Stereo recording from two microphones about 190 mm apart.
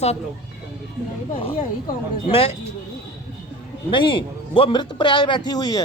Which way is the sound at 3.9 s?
25° left (ahead or behind).